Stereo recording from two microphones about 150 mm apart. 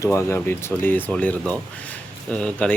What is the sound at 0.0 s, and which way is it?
Speech, 20° left (ahead or behind).